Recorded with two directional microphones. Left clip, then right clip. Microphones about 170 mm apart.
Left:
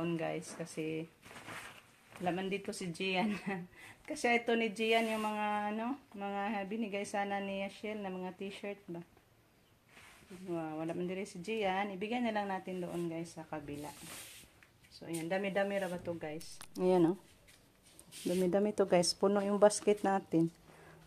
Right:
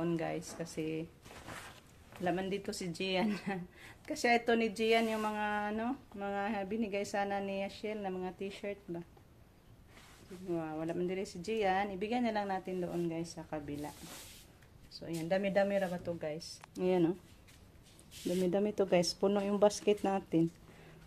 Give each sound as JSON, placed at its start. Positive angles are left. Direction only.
{"t": 0.0, "sound": "speech", "side_deg": 0}
{"t": 10.5, "sound": "speech", "side_deg": 0}
{"t": 15.0, "sound": "speech", "side_deg": -5}
{"t": 16.7, "sound": "speech", "side_deg": 15}
{"t": 18.2, "sound": "speech", "side_deg": 10}